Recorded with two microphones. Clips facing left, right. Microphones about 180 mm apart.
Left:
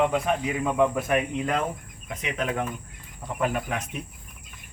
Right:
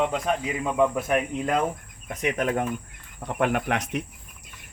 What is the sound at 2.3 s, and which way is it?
Speech, 50° right (ahead or behind).